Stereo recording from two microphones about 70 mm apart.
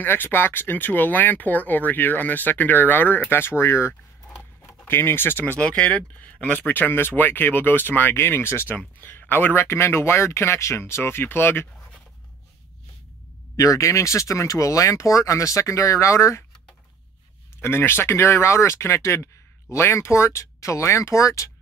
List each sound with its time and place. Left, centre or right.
0.0 s speech: left
5.6 s speech: centre; by 11.9 s left
13.6 s speech: left
17.6 s speech: left